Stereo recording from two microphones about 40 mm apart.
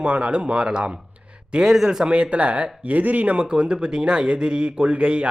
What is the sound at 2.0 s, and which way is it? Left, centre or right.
Speech, right.